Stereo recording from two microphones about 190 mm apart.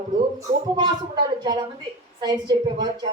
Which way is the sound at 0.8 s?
20° right (ahead or behind).